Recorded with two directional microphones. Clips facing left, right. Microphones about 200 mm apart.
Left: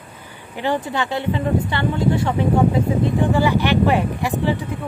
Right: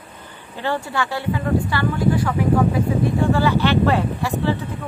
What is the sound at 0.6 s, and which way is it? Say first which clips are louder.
Speech: left 2 dB; 15° left (ahead or behind).